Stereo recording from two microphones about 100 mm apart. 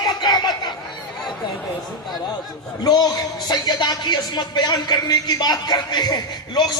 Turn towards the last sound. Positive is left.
turn(degrees=45)  # may be behind; listen again after turning